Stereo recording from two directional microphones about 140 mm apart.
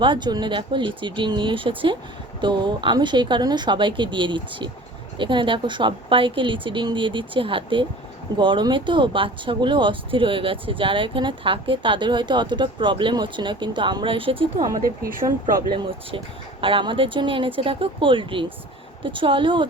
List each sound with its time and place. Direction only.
0.0 s speech: 35° right (ahead or behind)
14.8 s speech: 85° right
15.7 s speech: 40° right (ahead or behind)